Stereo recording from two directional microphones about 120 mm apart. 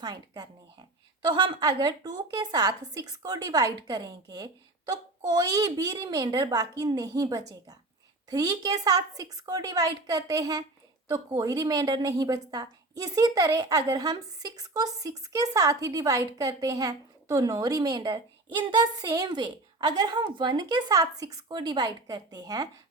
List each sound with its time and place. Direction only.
0.0 s a woman's voice: 35° right (ahead or behind)